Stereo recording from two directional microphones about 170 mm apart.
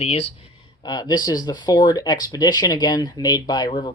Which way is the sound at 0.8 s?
25° left (ahead or behind).